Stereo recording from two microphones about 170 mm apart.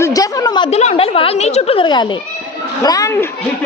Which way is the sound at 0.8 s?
40° left (ahead or behind).